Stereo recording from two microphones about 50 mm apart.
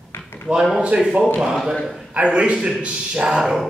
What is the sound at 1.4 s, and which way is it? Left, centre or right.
A man's voice, centre.